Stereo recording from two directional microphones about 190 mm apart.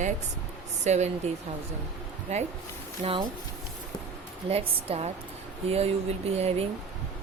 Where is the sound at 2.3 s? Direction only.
35° right (ahead or behind).